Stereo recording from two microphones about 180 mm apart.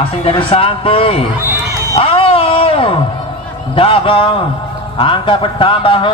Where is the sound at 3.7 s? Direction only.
30° left (ahead or behind).